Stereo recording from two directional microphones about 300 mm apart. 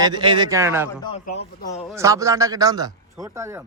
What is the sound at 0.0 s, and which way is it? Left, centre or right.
Speech, centre.